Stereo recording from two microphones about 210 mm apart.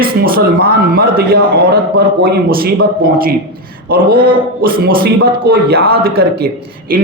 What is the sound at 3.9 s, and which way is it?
A man's voice, 45° right (ahead or behind).